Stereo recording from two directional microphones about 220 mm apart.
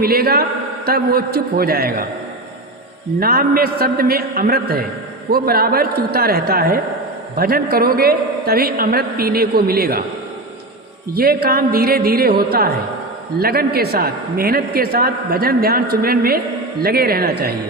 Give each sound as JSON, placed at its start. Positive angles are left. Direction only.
{"t": 0.0, "sound": "a man's voice", "side_deg": -45}
{"t": 3.2, "sound": "a man's voice", "side_deg": -40}
{"t": 11.1, "sound": "a man's voice", "side_deg": -45}